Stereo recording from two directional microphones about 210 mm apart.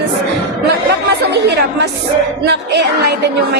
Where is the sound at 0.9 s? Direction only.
55° right (ahead or behind).